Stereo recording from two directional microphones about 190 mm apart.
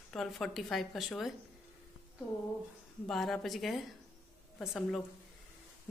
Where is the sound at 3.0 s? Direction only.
Centre (ahead or behind).